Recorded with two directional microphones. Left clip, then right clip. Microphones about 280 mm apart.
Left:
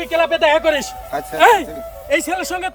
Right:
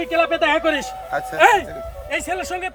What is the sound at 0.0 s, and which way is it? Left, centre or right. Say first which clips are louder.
Speech: left 3 dB; centre.